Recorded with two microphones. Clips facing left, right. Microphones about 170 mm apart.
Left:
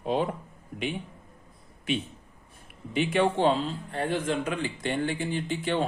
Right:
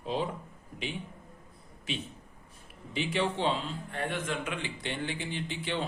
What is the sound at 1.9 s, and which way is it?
Speech, 60° left (ahead or behind).